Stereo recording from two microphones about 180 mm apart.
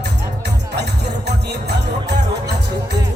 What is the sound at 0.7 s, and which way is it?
Music, 70° right (ahead or behind).